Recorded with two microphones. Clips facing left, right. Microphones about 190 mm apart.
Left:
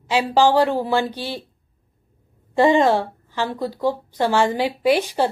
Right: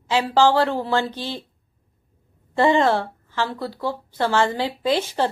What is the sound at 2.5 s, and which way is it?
A woman's voice, 15° left (ahead or behind).